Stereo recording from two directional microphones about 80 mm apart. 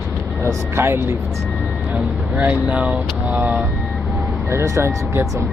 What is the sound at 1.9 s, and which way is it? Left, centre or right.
Speech, centre.